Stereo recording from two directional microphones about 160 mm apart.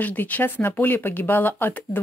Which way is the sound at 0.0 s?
10° left (ahead or behind).